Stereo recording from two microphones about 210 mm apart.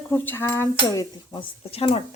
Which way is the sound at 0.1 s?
10° left (ahead or behind).